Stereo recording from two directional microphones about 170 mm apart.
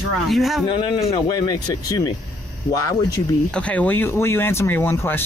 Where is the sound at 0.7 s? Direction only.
30° left (ahead or behind).